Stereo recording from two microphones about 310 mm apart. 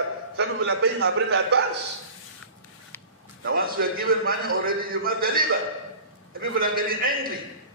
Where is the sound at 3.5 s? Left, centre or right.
Right.